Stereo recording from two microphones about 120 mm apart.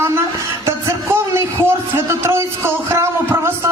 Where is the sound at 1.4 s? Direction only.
25° right (ahead or behind).